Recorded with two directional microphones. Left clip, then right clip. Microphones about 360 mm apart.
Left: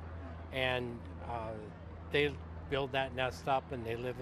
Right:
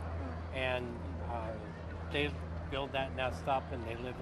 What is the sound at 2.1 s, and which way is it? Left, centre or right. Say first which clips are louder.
Speech: left 4 dB; left.